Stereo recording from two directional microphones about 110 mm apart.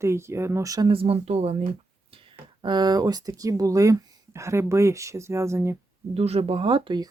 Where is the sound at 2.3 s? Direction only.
45° right (ahead or behind); by 5.7 s 25° right (ahead or behind).